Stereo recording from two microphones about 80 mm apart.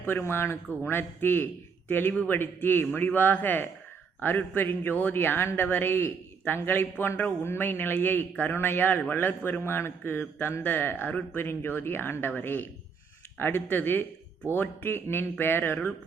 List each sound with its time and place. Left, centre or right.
0.0 s a man's voice: left